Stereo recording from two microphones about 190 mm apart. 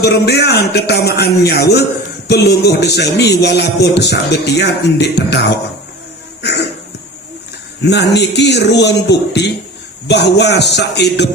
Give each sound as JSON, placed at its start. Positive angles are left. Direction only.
{"t": 0.0, "sound": "a man's voice", "side_deg": 60}
{"t": 7.9, "sound": "a man's voice", "side_deg": 60}